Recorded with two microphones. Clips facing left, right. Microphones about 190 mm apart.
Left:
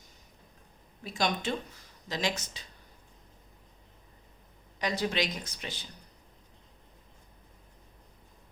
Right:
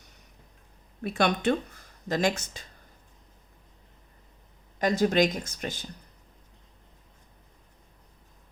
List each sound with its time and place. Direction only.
1.0 s speech: 60° right (ahead or behind)
4.8 s speech: 45° right (ahead or behind)